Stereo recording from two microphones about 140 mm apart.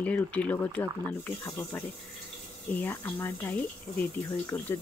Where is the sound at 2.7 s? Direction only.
15° left (ahead or behind).